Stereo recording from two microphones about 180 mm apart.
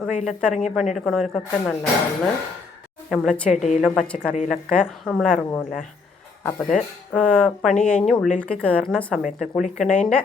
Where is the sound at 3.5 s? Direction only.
40° left (ahead or behind).